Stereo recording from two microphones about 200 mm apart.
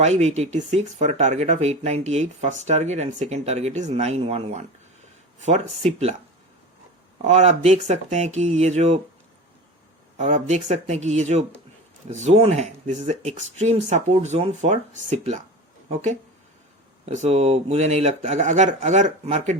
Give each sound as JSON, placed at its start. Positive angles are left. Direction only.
{"t": 0.0, "sound": "speech", "side_deg": -35}
{"t": 7.2, "sound": "speech", "side_deg": -35}
{"t": 10.2, "sound": "speech", "side_deg": -35}